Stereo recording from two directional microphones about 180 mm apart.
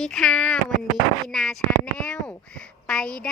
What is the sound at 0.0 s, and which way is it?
Speech, 5° left (ahead or behind).